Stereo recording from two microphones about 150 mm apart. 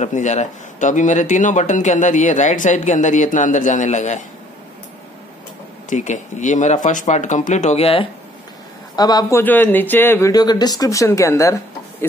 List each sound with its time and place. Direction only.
0.0 s speech: 50° left (ahead or behind)
5.9 s speech: 55° left (ahead or behind)
8.9 s speech: 25° left (ahead or behind)
9.4 s speech: 10° left (ahead or behind)
10.3 s speech: 25° left (ahead or behind)